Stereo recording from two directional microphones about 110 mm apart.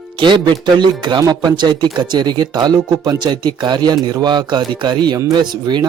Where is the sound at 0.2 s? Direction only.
45° right (ahead or behind).